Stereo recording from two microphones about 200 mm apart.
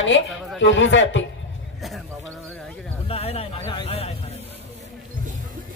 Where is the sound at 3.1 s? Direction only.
30° left (ahead or behind).